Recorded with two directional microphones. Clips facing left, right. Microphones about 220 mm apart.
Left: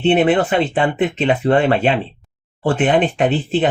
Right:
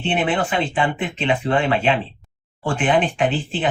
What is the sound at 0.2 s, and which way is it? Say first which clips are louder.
Speech: left 6 dB; 40° left (ahead or behind).